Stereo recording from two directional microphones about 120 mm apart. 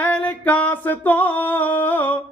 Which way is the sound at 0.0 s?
10° left (ahead or behind).